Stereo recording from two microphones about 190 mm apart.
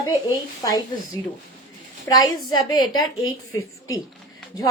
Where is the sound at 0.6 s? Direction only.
20° left (ahead or behind).